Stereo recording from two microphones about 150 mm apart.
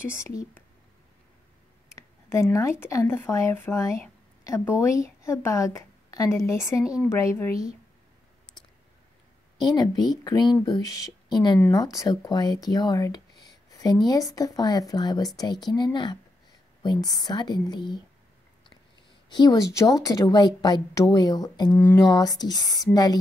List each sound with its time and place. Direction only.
0.1 s speech: 20° left (ahead or behind)
2.0 s a sound: 20° left (ahead or behind)
2.5 s speech: 20° left (ahead or behind)
9.8 s speech: 25° left (ahead or behind)
19.2 s speech: 30° left (ahead or behind)